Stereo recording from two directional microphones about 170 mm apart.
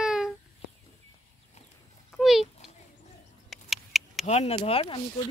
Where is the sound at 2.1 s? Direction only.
Centre (ahead or behind).